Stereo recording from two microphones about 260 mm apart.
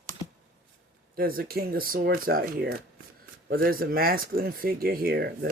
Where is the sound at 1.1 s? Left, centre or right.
Right.